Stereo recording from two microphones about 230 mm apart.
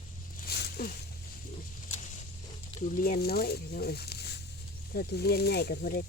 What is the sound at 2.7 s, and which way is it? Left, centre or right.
Speech, left.